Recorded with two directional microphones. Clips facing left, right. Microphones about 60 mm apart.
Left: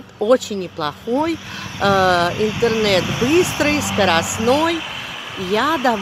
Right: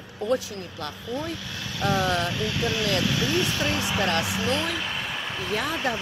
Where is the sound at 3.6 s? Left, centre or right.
Left.